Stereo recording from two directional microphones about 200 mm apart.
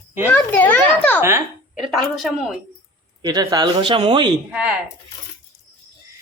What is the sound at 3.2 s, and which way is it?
Speech, 20° right (ahead or behind).